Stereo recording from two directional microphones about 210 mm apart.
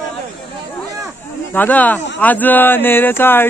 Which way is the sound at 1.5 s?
10° left (ahead or behind).